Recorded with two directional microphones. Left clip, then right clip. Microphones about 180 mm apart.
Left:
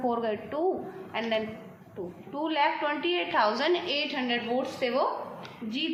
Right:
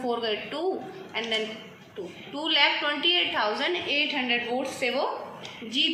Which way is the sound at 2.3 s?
50° left (ahead or behind).